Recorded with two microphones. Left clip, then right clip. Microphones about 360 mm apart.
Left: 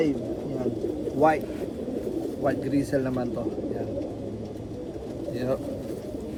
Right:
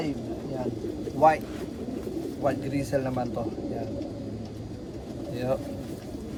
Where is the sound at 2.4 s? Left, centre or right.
Right.